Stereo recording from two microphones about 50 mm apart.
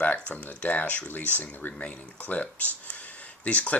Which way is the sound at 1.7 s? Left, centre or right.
Left.